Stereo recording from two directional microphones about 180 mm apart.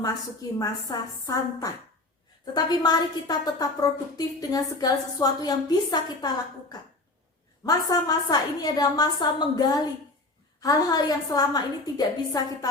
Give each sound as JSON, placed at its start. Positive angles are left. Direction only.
{"t": 0.6, "sound": "a woman's voice", "side_deg": 20}